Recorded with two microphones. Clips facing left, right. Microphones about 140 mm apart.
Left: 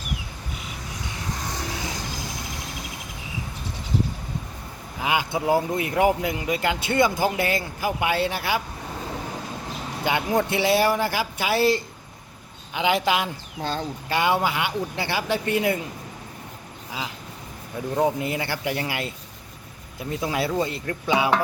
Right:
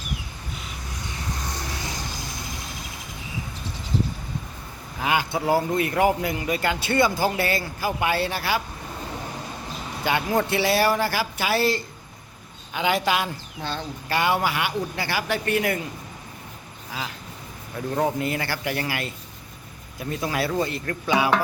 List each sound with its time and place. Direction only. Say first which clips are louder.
5.0 s speech: even; 15° left (ahead or behind)
10.0 s speech: even; 15° left (ahead or behind)
13.6 s speech: left 3 dB; 40° left (ahead or behind)
14.1 s speech: even; 20° left (ahead or behind)
17.9 s speech: left 1 dB; 15° left (ahead or behind)